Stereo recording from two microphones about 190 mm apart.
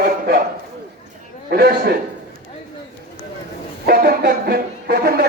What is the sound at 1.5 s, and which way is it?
Speech, 55° right (ahead or behind).